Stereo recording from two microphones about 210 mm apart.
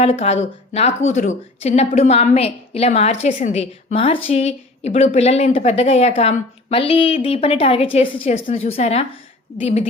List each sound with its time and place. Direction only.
0.0 s a woman's voice: 30° left (ahead or behind)